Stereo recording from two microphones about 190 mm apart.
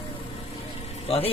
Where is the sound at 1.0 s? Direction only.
30° left (ahead or behind).